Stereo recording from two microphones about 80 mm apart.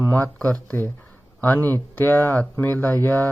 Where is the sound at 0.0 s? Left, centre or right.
Left.